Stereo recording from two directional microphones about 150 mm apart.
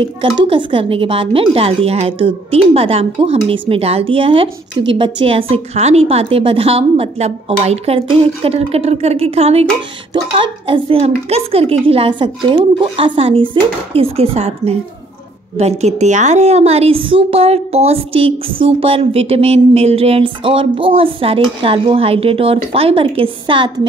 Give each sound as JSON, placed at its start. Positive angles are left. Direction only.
{"t": 0.0, "sound": "a woman's voice", "side_deg": -35}